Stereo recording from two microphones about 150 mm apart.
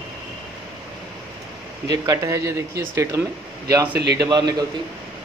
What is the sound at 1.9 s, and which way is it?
Speech, 25° right (ahead or behind).